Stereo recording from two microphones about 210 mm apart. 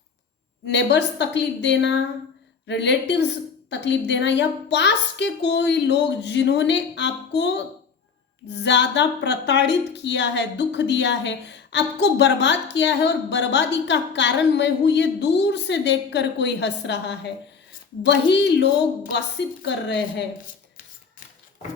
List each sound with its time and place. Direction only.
0.7 s speech: 55° left (ahead or behind)